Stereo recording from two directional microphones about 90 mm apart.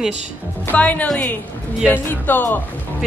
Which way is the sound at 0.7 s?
15° left (ahead or behind).